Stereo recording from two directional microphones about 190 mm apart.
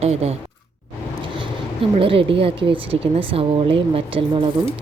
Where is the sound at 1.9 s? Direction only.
30° right (ahead or behind).